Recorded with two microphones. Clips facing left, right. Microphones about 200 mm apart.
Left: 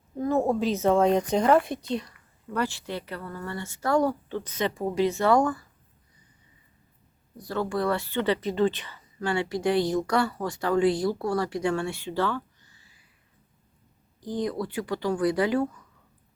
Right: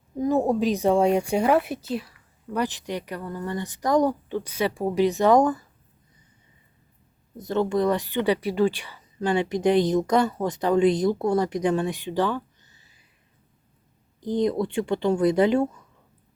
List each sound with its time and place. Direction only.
0.2 s speech: 15° right (ahead or behind)
7.3 s speech: 20° right (ahead or behind)
14.2 s speech: 20° right (ahead or behind)